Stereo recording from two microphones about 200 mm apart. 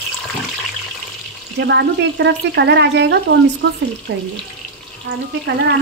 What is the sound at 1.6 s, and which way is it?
Speech, 60° right (ahead or behind).